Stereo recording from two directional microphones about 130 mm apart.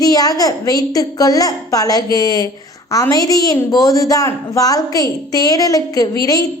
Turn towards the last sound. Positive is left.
turn(degrees=25)  # may be behind; listen again after turning